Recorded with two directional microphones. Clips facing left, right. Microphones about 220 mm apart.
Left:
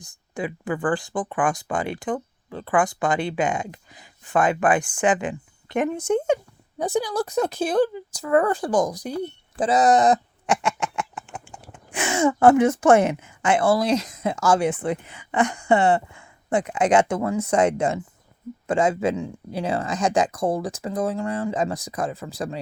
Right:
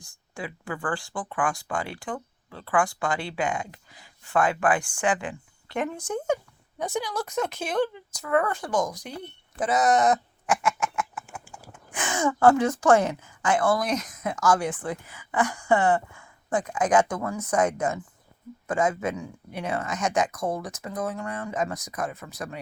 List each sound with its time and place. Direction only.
0.0 s speech: 20° left (ahead or behind)